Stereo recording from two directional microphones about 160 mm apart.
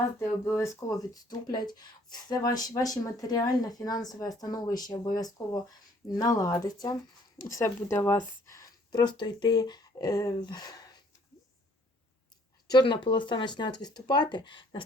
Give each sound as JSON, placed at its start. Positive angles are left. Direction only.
{"t": 0.2, "sound": "speech", "side_deg": 15}
{"t": 12.6, "sound": "speech", "side_deg": 30}